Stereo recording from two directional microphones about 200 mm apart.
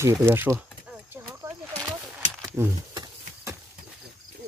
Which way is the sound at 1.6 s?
5° left (ahead or behind).